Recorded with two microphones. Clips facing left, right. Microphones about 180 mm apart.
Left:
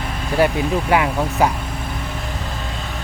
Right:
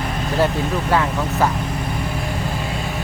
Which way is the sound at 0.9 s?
15° left (ahead or behind).